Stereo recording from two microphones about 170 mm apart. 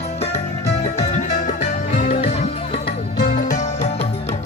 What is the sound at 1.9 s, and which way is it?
Music, 50° left (ahead or behind).